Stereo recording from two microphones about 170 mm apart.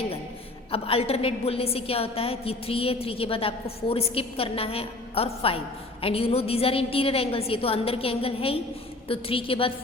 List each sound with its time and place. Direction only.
0.7 s a woman's voice: 35° left (ahead or behind)